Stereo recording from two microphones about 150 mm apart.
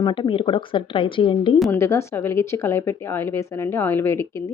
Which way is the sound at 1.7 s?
20° left (ahead or behind).